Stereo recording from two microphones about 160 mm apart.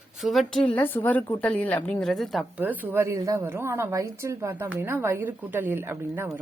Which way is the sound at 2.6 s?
10° right (ahead or behind).